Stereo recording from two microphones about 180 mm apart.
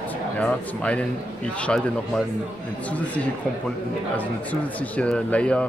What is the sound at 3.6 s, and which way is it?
Speech, 10° left (ahead or behind).